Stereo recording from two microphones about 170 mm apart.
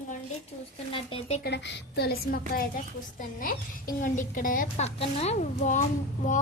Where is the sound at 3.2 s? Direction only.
55° left (ahead or behind).